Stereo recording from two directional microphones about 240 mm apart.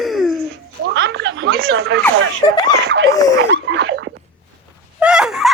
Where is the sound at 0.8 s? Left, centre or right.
Right.